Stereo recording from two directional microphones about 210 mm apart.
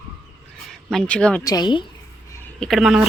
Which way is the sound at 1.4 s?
20° left (ahead or behind).